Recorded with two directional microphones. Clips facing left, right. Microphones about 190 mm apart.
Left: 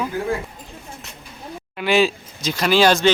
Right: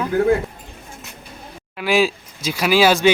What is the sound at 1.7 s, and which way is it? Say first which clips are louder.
Speech: even; 5° right (ahead or behind).